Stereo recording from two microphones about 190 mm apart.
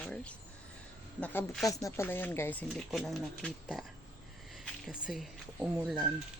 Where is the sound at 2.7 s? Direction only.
Centre (ahead or behind).